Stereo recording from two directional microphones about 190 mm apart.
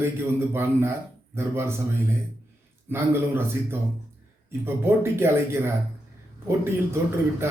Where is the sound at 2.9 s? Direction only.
10° right (ahead or behind).